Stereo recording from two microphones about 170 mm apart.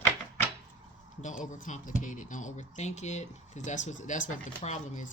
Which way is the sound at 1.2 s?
50° left (ahead or behind).